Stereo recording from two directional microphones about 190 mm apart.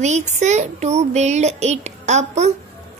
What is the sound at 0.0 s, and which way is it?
A woman's voice, 40° right (ahead or behind).